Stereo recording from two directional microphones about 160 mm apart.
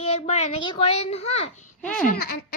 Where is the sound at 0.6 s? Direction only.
35° left (ahead or behind).